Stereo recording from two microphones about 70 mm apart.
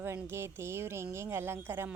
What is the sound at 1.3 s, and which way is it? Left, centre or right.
Speech, right.